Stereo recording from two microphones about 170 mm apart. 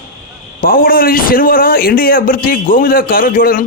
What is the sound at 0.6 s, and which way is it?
A man's voice, 55° left (ahead or behind).